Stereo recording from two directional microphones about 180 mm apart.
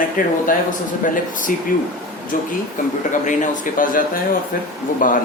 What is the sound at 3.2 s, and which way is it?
Speech, 45° left (ahead or behind).